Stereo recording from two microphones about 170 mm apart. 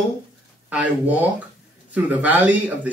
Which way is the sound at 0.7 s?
10° right (ahead or behind).